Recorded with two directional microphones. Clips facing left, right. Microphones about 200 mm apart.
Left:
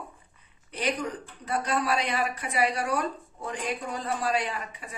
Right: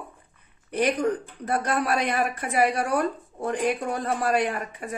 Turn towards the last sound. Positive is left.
turn(degrees=-55)  # may be behind; listen again after turning